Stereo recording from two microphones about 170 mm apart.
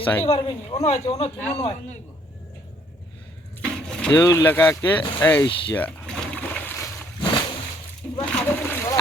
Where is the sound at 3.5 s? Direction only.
5° left (ahead or behind).